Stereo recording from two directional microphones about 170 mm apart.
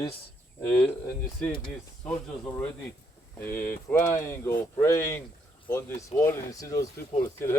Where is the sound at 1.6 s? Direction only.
5° left (ahead or behind).